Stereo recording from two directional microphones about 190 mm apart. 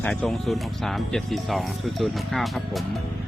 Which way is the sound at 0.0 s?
5° left (ahead or behind).